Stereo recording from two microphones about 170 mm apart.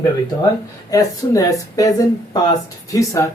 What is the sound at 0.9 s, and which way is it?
Speech, 20° left (ahead or behind).